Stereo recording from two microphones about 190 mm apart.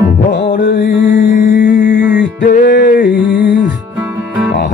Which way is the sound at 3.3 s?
70° left (ahead or behind).